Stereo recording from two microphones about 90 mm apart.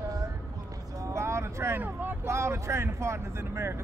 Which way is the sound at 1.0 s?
30° right (ahead or behind).